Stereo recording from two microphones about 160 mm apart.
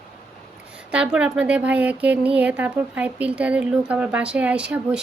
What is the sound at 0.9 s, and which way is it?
Speech, 5° right (ahead or behind).